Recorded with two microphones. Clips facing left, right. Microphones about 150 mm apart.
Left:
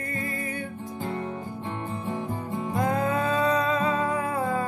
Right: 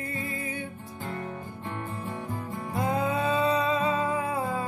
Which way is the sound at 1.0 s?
25° left (ahead or behind).